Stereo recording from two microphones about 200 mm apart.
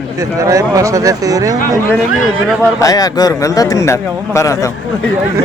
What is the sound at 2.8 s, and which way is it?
A man's voice, 20° left (ahead or behind).